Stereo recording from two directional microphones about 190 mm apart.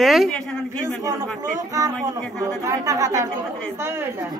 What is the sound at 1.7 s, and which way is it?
A woman's voice, 15° right (ahead or behind).